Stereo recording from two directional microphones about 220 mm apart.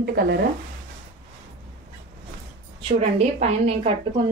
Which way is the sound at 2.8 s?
30° right (ahead or behind).